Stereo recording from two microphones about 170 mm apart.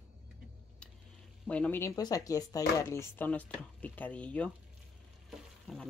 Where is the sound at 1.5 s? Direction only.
10° left (ahead or behind).